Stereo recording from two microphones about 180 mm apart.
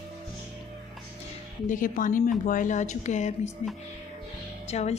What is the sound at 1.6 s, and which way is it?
A woman's voice, 45° left (ahead or behind).